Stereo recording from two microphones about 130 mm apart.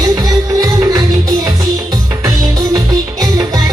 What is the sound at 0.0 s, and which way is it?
Music, 25° right (ahead or behind).